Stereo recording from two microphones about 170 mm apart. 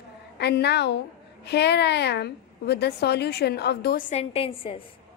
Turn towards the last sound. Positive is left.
turn(degrees=30)  # may be behind; listen again after turning